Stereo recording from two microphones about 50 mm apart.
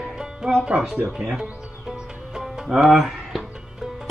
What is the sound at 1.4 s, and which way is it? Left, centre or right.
Music, centre.